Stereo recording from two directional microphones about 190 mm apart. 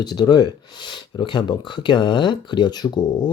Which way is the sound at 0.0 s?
20° left (ahead or behind).